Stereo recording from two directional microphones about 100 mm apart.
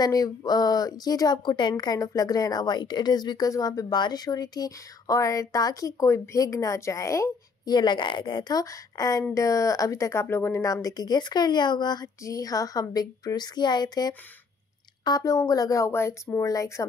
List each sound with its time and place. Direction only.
0.0 s speech: 40° left (ahead or behind)
7.7 s a woman's voice: 50° left (ahead or behind); by 16.8 s 30° left (ahead or behind)